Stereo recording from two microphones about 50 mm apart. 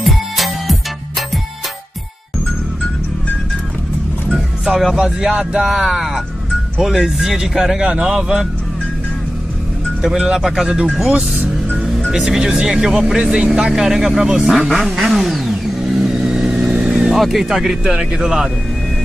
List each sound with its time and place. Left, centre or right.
0.0 s music: centre
4.6 s speech: centre
5.7 s speech: centre
10.0 s speech: centre
12.1 s speech: centre
15.0 s vehicle: centre
17.1 s speech: centre